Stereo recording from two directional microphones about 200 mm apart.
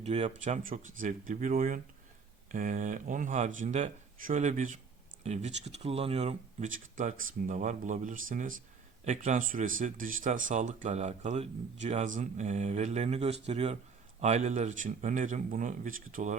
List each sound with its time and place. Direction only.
0.0 s speech: 35° right (ahead or behind)